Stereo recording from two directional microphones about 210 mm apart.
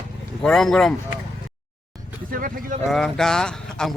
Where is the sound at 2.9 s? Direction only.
Centre (ahead or behind).